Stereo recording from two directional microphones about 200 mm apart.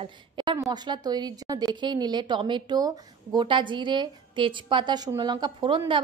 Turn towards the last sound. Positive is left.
turn(degrees=-25)  # may be behind; listen again after turning